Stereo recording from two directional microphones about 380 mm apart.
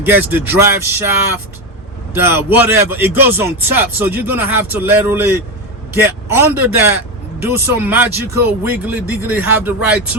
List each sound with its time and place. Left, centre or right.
0.0 s speech: centre
2.1 s speech: centre